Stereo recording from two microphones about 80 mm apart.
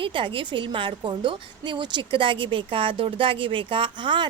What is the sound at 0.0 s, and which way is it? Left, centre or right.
A woman's voice, right.